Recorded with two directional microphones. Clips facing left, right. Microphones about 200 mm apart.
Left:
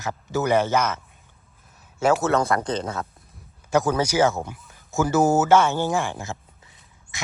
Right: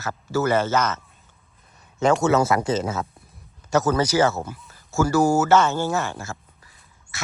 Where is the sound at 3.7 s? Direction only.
10° left (ahead or behind).